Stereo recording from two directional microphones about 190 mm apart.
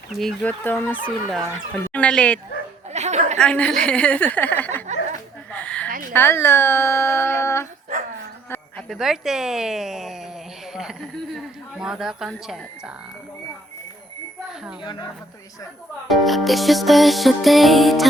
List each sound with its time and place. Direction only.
0.2 s speech: 5° left (ahead or behind)
0.9 s music: 5° right (ahead or behind)
2.9 s a woman's voice: 35° right (ahead or behind)
3.3 s speech: 5° left (ahead or behind)
5.5 s a sound: 5° left (ahead or behind)
6.1 s speech: 10° left (ahead or behind)
8.9 s music: centre (ahead or behind)
11.3 s speech: centre (ahead or behind)
16.0 s music: centre (ahead or behind)